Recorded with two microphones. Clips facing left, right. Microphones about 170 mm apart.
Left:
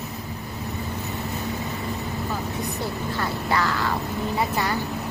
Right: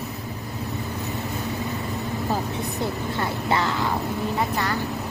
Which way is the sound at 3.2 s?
25° right (ahead or behind).